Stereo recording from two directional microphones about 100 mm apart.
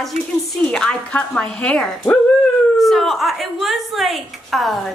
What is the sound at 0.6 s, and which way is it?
A woman's voice, 10° left (ahead or behind).